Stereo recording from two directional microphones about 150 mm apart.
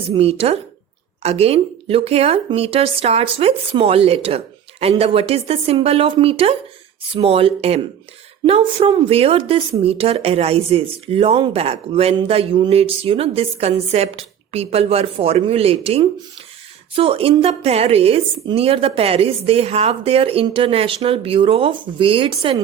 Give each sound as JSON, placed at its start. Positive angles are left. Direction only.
{"t": 0.1, "sound": "speech", "side_deg": -40}